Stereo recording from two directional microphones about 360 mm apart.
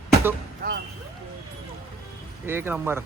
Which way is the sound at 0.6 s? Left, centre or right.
Right.